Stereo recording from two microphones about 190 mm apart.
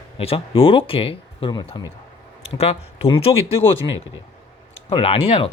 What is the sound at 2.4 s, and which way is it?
Speech, 30° left (ahead or behind).